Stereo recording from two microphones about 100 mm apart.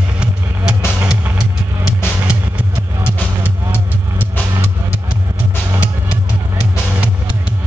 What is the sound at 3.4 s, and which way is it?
Music, 20° right (ahead or behind).